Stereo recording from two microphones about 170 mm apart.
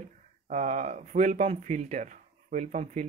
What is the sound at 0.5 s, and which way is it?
Speech, 45° right (ahead or behind).